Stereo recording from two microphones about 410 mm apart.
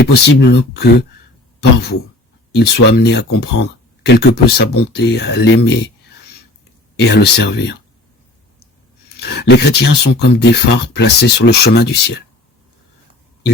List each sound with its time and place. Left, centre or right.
0.0 s speech: left
2.6 s speech: left
7.0 s speech: left
9.2 s speech: left